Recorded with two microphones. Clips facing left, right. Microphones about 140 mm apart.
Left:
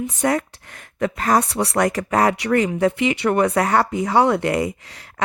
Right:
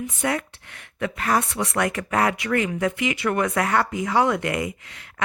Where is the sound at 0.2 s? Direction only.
40° left (ahead or behind).